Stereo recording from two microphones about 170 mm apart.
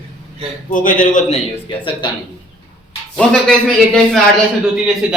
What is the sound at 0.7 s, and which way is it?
Speech, 50° left (ahead or behind).